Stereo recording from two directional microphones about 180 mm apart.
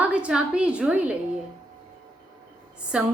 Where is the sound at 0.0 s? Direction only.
5° right (ahead or behind).